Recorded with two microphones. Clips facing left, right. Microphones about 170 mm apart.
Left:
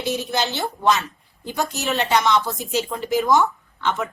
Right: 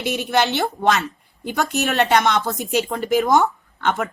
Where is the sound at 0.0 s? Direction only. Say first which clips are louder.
Right 3 dB; 65° right (ahead or behind).